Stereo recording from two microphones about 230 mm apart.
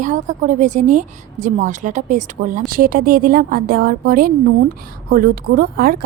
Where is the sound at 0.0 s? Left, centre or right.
Right.